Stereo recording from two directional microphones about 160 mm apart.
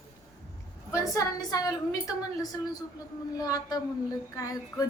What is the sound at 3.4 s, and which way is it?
A woman's voice, 25° left (ahead or behind).